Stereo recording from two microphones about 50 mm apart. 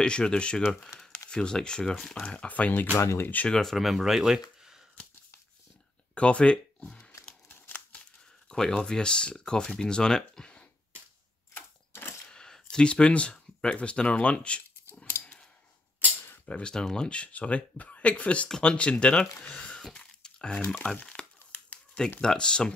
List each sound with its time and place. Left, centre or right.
0.0 s speech: centre
2.2 s speech: left
3.6 s speech: centre
6.1 s speech: left
7.4 s crumpling: left
8.5 s speech: centre
11.5 s a sound: left
12.3 s speech: centre
16.4 s speech: left
20.0 s a sound: centre
20.8 s speech: left